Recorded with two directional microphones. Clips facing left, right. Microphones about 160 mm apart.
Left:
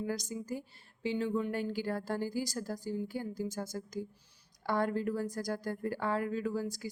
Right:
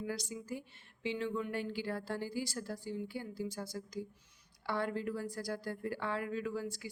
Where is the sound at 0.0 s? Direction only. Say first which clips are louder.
Left 4 dB; 45° left (ahead or behind).